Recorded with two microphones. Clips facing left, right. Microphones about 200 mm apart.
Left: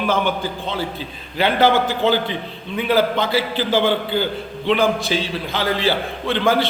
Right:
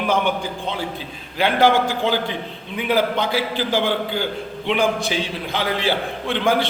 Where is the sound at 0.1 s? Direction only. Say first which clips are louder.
Right 2 dB; 15° right (ahead or behind).